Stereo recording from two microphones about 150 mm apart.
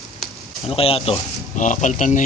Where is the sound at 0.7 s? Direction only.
40° left (ahead or behind).